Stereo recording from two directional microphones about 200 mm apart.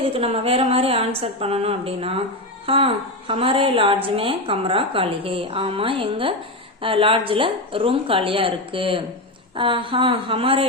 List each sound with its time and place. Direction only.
0.1 s a woman's voice: 30° right (ahead or behind)